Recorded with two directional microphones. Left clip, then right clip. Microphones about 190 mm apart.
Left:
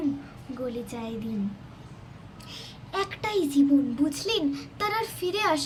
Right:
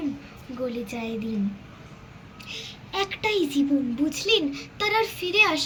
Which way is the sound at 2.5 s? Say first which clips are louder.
Right 2 dB; 20° left (ahead or behind).